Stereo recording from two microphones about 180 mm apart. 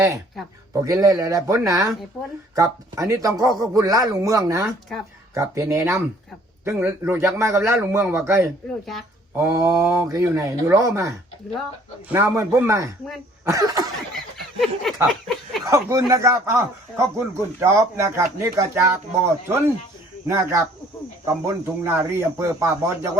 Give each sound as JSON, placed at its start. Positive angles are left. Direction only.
{"t": 0.7, "sound": "speech", "side_deg": -15}
{"t": 4.6, "sound": "speech", "side_deg": 0}
{"t": 5.3, "sound": "speech", "side_deg": -15}
{"t": 12.1, "sound": "speech", "side_deg": -15}
{"t": 13.4, "sound": "cough", "side_deg": -20}
{"t": 14.1, "sound": "a sound", "side_deg": 0}
{"t": 15.6, "sound": "speech", "side_deg": -20}